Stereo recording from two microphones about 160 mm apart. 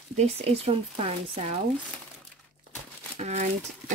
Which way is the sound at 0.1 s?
40° right (ahead or behind).